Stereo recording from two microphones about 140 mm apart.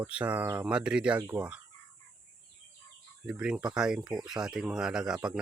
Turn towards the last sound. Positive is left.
turn(degrees=-5)  # may be behind; listen again after turning